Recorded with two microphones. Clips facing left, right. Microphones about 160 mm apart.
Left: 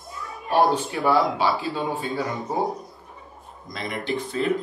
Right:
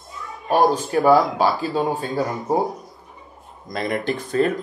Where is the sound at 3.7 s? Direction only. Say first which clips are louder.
Right 4 dB; 55° right (ahead or behind).